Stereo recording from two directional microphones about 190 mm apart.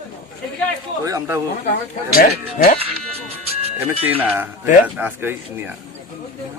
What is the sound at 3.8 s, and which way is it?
Speech, 10° right (ahead or behind).